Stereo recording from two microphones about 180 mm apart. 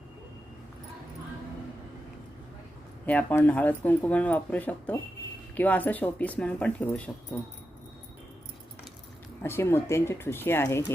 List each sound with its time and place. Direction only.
3.1 s speech: 10° left (ahead or behind)
9.4 s speech: 15° left (ahead or behind)